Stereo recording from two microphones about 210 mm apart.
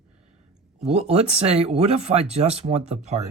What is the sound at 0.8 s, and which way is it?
Speech, 30° right (ahead or behind).